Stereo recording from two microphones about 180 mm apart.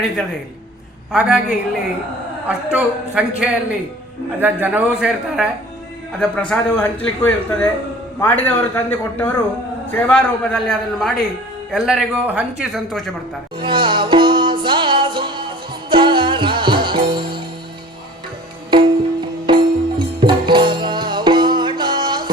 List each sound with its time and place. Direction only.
1.1 s a woman's voice: 5° right (ahead or behind)
6.1 s a man's voice: 5° left (ahead or behind)
13.6 s music: 25° right (ahead or behind)
18.7 s music: 25° right (ahead or behind)